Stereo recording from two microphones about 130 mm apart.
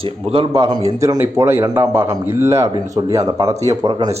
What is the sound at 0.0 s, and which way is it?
Speech, 45° right (ahead or behind).